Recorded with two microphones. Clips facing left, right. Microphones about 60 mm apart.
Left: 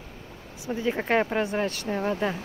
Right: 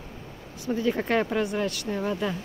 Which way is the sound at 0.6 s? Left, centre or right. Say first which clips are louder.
Right 1 dB; left.